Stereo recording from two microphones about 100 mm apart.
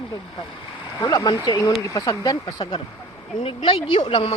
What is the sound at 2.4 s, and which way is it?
Speech, 65° left (ahead or behind).